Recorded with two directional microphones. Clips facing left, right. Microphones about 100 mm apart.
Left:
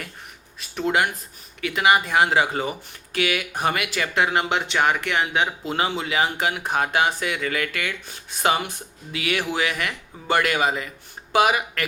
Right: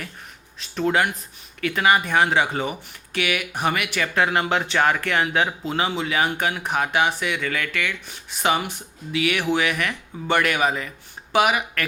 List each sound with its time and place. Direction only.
0.8 s speech: 20° left (ahead or behind)
2.0 s speech: 30° left (ahead or behind)
5.7 s speech: 35° left (ahead or behind)
9.1 s speech: 35° left (ahead or behind)